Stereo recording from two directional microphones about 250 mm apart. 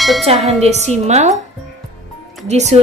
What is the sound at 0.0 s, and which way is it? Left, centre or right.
Speech, centre.